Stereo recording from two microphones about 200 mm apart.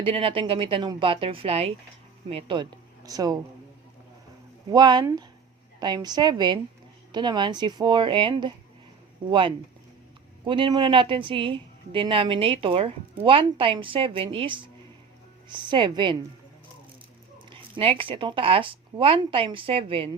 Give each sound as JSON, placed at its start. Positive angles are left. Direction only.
{"t": 0.0, "sound": "a woman's voice", "side_deg": -25}
{"t": 4.7, "sound": "a woman's voice", "side_deg": -20}
{"t": 10.4, "sound": "a woman's voice", "side_deg": -25}
{"t": 17.3, "sound": "speech", "side_deg": -25}